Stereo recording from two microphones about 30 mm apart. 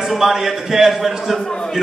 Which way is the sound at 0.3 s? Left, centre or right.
Centre.